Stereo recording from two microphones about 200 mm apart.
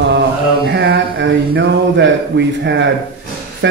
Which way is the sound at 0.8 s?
65° right (ahead or behind).